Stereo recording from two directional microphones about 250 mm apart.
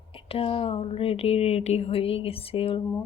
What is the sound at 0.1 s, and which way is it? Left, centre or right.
Speech, left.